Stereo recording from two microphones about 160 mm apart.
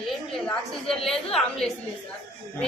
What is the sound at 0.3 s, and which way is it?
A woman's voice, 5° left (ahead or behind).